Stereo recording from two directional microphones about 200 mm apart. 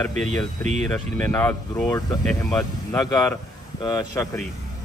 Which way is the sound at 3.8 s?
20° left (ahead or behind).